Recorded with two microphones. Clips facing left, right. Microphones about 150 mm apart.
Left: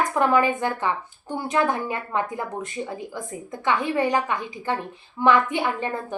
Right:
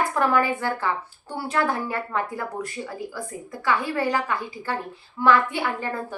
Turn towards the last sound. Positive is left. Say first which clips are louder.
# left 2 dB
turn(degrees=20)  # may be behind; listen again after turning